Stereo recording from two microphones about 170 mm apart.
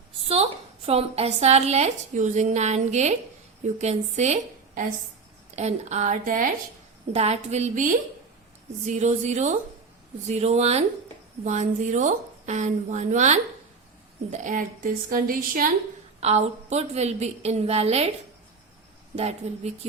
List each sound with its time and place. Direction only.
0.9 s a woman's voice: 35° right (ahead or behind)
5.5 s a woman's voice: 40° right (ahead or behind)
7.1 s a woman's voice: 40° right (ahead or behind); by 15.7 s 55° right (ahead or behind)
16.2 s a woman's voice: 40° right (ahead or behind)
19.1 s a woman's voice: 40° right (ahead or behind)